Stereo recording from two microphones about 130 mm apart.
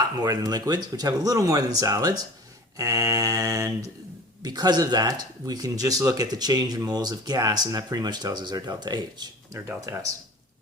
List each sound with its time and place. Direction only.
0.2 s speech: 30° right (ahead or behind)
9.6 s speech: 20° right (ahead or behind)